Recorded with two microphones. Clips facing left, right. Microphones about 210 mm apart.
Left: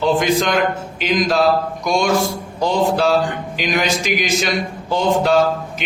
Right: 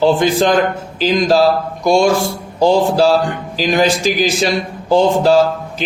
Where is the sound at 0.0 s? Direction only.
30° right (ahead or behind).